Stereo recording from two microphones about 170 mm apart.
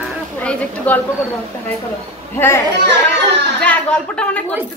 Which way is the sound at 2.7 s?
90° right.